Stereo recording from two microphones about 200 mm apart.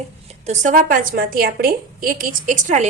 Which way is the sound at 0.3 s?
35° right (ahead or behind).